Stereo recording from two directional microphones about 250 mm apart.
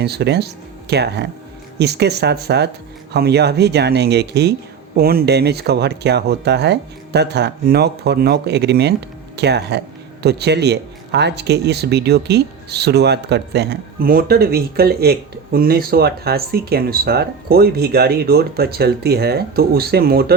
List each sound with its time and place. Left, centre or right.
0.0 s speech: right